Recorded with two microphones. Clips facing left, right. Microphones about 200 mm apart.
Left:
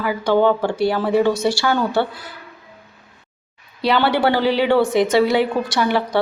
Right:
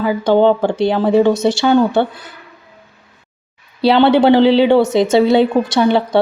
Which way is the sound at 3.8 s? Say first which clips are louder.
Right 7 dB; 25° right (ahead or behind).